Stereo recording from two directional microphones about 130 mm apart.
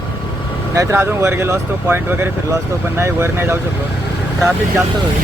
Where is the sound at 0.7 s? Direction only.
20° right (ahead or behind).